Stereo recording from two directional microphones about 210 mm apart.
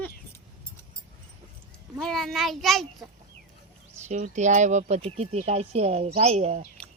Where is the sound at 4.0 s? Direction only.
35° right (ahead or behind).